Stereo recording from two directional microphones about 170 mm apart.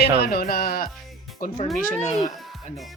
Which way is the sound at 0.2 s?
65° left (ahead or behind).